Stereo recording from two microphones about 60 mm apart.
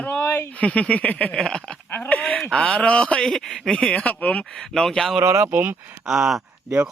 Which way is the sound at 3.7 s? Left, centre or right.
Left.